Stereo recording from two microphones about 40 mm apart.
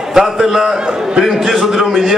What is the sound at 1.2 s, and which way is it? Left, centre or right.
Speech, centre.